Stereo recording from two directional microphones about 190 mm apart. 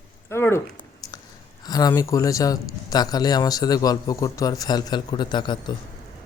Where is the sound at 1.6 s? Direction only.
20° left (ahead or behind).